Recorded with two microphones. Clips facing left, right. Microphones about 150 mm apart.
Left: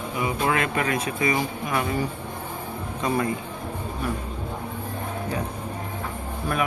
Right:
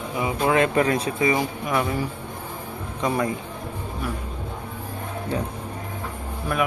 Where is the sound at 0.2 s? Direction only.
25° right (ahead or behind).